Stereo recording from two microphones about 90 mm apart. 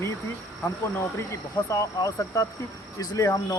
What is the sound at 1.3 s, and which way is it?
Speech, 40° left (ahead or behind).